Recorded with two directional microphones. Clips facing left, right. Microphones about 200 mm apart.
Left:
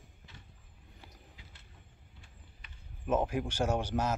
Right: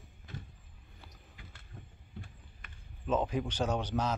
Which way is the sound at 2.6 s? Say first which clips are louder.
Right 5 dB; 50° right (ahead or behind).